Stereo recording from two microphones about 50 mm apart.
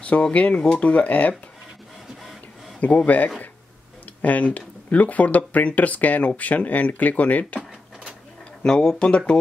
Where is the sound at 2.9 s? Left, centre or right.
Left.